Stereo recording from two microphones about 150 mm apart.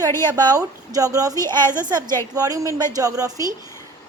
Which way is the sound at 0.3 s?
25° right (ahead or behind).